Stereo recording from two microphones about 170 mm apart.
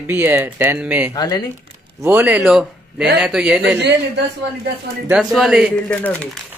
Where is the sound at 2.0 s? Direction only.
10° right (ahead or behind).